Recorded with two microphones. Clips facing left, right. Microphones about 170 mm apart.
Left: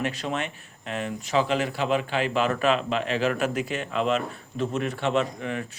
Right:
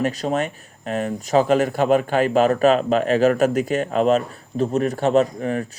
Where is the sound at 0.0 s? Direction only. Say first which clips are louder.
Right 7 dB; 40° right (ahead or behind).